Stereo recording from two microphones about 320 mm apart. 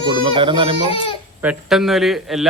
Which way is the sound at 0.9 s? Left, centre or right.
Centre.